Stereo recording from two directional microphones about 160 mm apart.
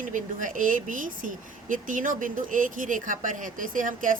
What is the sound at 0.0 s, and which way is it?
Speech, 55° right (ahead or behind).